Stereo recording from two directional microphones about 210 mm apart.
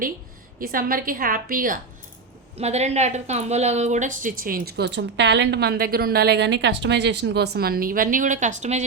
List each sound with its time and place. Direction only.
0.6 s a woman's voice: 45° right (ahead or behind)